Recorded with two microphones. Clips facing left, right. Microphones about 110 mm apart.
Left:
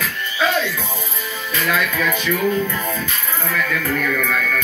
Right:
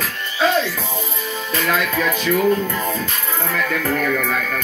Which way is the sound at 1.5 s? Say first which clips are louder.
Right 1 dB; 35° right (ahead or behind).